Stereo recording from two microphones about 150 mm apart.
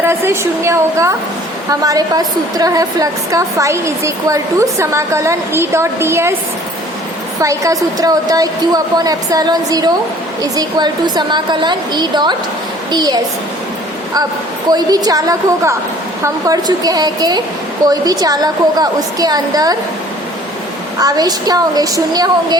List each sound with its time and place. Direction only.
0.0 s a woman's voice: 15° right (ahead or behind)
7.4 s a woman's voice: 20° right (ahead or behind)
14.7 s a woman's voice: 25° right (ahead or behind)
21.0 s a woman's voice: 25° right (ahead or behind)